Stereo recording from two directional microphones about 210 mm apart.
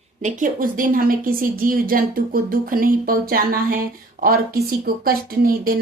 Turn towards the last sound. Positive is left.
turn(degrees=-45)  # may be behind; listen again after turning